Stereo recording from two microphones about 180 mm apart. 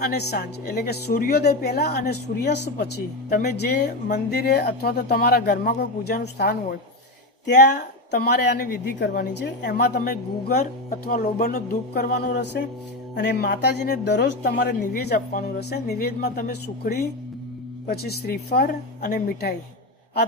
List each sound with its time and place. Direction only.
0.0 s speech: 65° left (ahead or behind)
8.1 s a woman's voice: 60° left (ahead or behind)
10.6 s speech: 45° left (ahead or behind)
11.4 s speech: 45° left (ahead or behind)
11.9 s a woman's voice: 60° left (ahead or behind)